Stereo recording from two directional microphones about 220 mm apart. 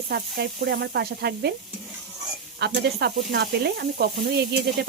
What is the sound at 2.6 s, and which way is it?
Speech, 50° right (ahead or behind).